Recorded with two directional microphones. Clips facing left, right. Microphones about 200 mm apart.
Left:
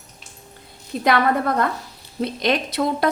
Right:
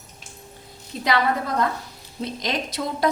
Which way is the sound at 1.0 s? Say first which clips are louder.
Left 4 dB; 55° left (ahead or behind).